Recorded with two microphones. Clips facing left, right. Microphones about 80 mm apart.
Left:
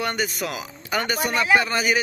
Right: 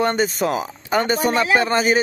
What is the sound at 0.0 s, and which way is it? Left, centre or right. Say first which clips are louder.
Speech: right 7 dB; right.